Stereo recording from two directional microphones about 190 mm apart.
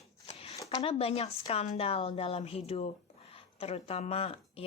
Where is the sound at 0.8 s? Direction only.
30° left (ahead or behind).